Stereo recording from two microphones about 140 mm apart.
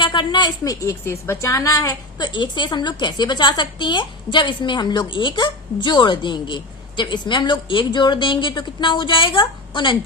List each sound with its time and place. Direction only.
0.0 s a woman's voice: 35° left (ahead or behind)